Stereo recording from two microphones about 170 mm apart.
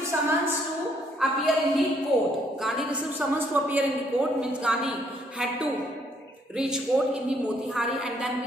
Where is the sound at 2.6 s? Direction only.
Centre (ahead or behind).